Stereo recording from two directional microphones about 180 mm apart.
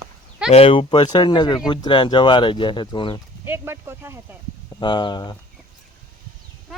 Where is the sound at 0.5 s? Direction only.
30° left (ahead or behind).